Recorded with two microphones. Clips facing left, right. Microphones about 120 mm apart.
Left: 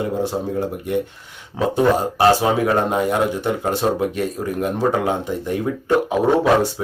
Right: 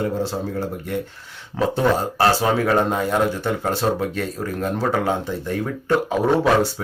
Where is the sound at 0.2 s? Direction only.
20° left (ahead or behind).